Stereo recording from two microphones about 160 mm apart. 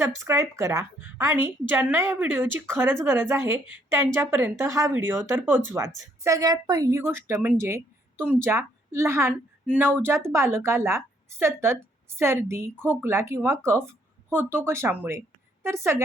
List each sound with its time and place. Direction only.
0.0 s a woman's voice: 20° right (ahead or behind)